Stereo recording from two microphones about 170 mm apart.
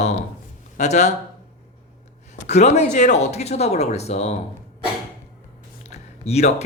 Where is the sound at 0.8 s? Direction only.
40° left (ahead or behind).